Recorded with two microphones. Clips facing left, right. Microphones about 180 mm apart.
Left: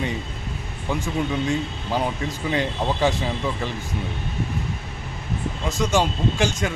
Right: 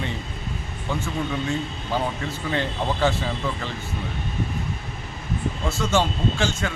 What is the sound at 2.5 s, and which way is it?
Speech, 15° left (ahead or behind).